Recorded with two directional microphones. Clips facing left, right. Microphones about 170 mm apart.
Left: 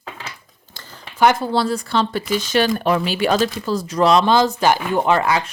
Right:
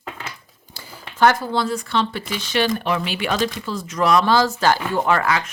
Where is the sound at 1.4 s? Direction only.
35° left (ahead or behind).